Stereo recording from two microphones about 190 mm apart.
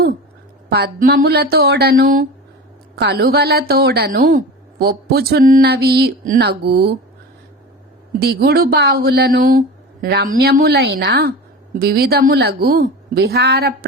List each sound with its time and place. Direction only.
0.7 s speech: 55° right (ahead or behind)
8.2 s speech: 55° right (ahead or behind)